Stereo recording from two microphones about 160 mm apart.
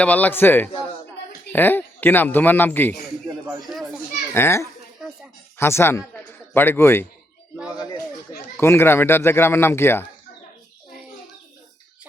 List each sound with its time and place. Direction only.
0.0 s speech: 10° left (ahead or behind)
3.6 s children playing: centre (ahead or behind)
4.4 s speech: 15° left (ahead or behind)
8.5 s speech: 15° left (ahead or behind)